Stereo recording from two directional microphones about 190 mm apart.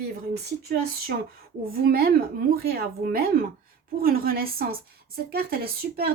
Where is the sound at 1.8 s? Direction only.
50° right (ahead or behind).